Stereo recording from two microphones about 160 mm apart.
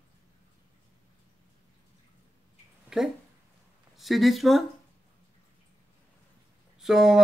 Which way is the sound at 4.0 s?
Centre (ahead or behind).